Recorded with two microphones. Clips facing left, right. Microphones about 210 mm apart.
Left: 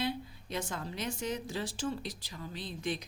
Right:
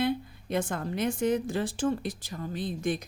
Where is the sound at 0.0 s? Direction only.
55° right (ahead or behind).